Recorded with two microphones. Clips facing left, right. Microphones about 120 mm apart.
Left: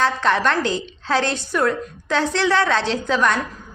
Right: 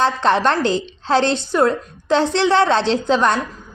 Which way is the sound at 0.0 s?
30° right (ahead or behind).